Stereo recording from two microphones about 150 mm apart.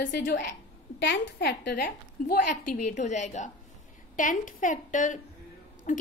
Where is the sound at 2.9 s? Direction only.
50° left (ahead or behind).